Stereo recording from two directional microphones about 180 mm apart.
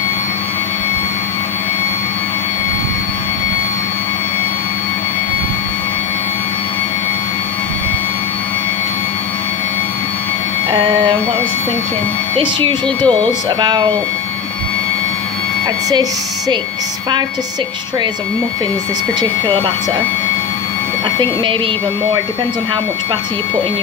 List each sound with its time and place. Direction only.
10.7 s a sound: 25° right (ahead or behind)
12.4 s speech: 25° right (ahead or behind)
19.2 s speech: 25° right (ahead or behind)